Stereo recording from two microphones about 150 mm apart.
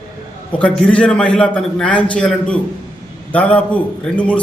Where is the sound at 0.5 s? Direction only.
5° left (ahead or behind).